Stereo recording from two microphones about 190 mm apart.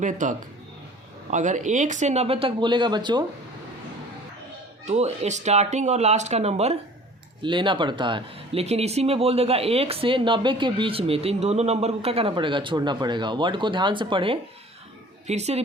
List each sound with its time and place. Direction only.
0.0 s speech: 40° right (ahead or behind); by 3.2 s 25° right (ahead or behind)
4.9 s speech: 35° right (ahead or behind)